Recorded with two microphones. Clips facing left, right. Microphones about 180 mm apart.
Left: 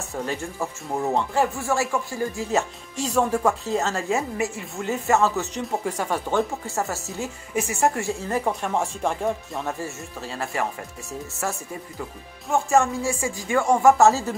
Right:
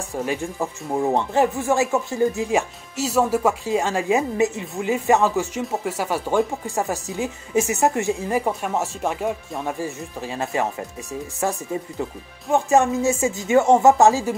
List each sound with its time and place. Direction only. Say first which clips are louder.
0.1 s speech: right 3 dB; 15° right (ahead or behind)
3.0 s speech: right 2 dB; 5° right (ahead or behind)